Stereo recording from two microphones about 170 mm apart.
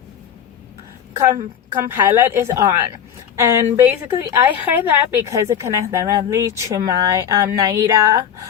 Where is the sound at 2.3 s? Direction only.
15° right (ahead or behind).